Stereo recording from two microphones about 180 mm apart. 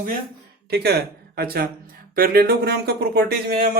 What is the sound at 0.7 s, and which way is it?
Speech, 65° right (ahead or behind).